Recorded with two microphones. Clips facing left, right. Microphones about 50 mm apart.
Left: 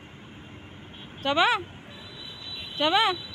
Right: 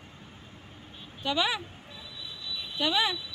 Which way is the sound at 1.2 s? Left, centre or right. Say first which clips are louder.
Left 6 dB; left.